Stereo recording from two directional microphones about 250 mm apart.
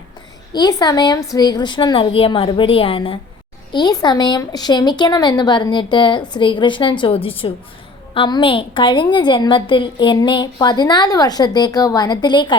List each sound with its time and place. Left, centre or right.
0.5 s a woman's voice: centre